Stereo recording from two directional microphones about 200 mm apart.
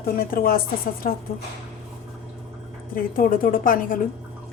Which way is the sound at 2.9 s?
45° left (ahead or behind).